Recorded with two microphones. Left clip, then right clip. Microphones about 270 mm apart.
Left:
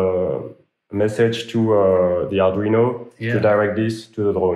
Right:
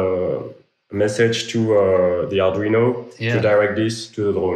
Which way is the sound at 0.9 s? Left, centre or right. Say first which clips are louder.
Right 1 dB; centre.